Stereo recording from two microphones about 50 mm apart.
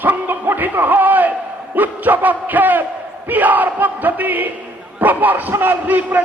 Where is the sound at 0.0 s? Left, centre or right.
Right.